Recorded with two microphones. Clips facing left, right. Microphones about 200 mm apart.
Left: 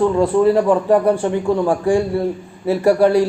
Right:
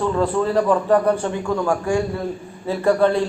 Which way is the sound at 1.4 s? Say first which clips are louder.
Left 4 dB; 30° left (ahead or behind).